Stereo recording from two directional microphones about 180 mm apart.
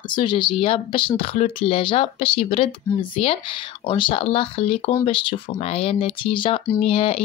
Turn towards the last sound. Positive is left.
turn(degrees=30)  # may be behind; listen again after turning